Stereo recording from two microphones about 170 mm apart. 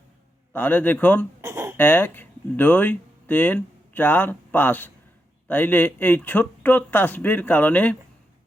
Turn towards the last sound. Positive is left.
turn(degrees=10)  # may be behind; listen again after turning